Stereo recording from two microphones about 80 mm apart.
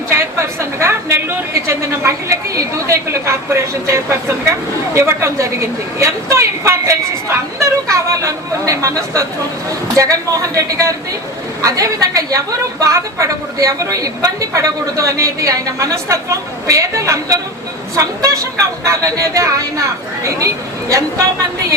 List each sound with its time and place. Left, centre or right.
0.1 s a woman's voice: right